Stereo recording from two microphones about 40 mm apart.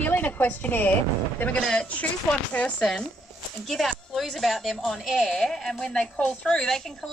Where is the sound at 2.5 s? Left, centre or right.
Left.